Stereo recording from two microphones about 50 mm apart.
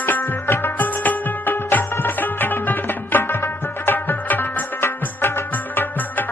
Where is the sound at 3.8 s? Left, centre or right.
Left.